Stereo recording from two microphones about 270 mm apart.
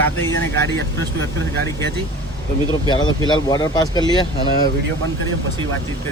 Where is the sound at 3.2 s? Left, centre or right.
Centre.